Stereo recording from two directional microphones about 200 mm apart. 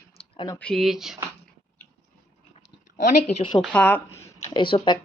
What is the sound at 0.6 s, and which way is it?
Speech, centre (ahead or behind).